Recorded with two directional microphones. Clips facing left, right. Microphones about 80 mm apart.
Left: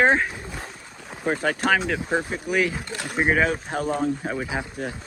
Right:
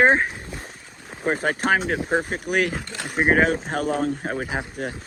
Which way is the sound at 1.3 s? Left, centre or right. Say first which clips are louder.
Right 1 dB; right.